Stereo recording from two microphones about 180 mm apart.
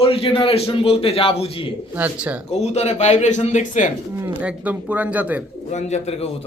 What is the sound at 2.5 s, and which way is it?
A man's voice, 35° left (ahead or behind).